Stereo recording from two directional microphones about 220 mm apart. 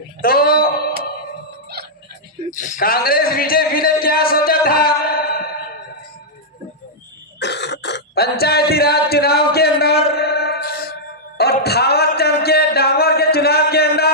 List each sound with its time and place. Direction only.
0.2 s speech: 40° left (ahead or behind)
2.5 s a man's voice: 35° left (ahead or behind)
7.3 s cough: 50° left (ahead or behind)
11.3 s a sound: 45° left (ahead or behind)